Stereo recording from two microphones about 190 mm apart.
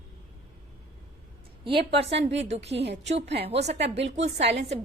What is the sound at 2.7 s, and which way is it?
A woman's voice, 65° right (ahead or behind).